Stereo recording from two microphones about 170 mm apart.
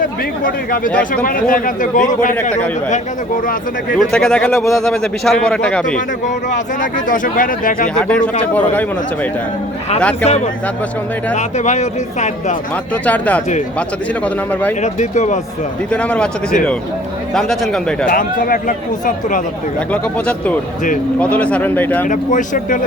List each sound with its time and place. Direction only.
0.0 s speech: 55° left (ahead or behind)
2.3 s speech: 10° left (ahead or behind)
3.9 s a man's voice: 5° left (ahead or behind)
6.2 s speech: 50° left (ahead or behind)
7.9 s speech: 5° left (ahead or behind)
10.0 s speech: 10° left (ahead or behind)
10.2 s speech: 40° left (ahead or behind)
12.9 s speech: 10° left (ahead or behind)
14.5 s speech: 10° left (ahead or behind)
14.8 s speech: 45° left (ahead or behind)
15.9 s a man's voice: 5° left (ahead or behind)
18.1 s speech: 55° left (ahead or behind)
19.9 s speech: 10° left (ahead or behind)
22.0 s speech: 50° left (ahead or behind)